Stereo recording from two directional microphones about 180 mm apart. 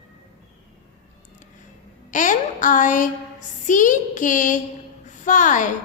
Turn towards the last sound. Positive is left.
turn(degrees=45)  # may be behind; listen again after turning